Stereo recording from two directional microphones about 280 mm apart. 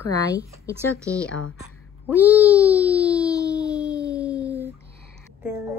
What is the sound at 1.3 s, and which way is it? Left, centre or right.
Speech, left.